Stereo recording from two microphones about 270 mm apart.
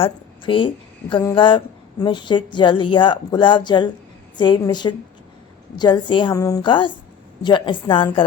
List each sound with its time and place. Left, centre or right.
0.0 s a woman's voice: centre